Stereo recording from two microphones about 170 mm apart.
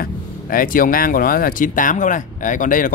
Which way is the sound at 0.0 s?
55° left (ahead or behind).